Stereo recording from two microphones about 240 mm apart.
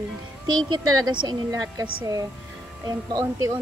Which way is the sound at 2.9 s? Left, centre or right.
Centre.